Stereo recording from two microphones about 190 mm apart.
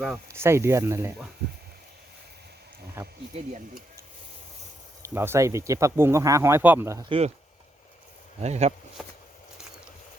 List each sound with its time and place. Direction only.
0.3 s speech: 15° right (ahead or behind)
5.0 s speech: 15° right (ahead or behind)
7.0 s speech: 30° right (ahead or behind)
8.4 s speech: 35° right (ahead or behind)
9.0 s a sound: 5° right (ahead or behind)